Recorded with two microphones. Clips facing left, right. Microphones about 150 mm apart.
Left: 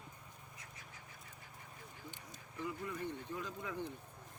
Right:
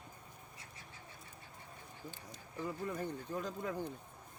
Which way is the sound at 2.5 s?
35° right (ahead or behind).